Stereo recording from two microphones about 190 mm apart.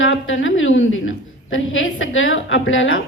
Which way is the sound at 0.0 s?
85° left.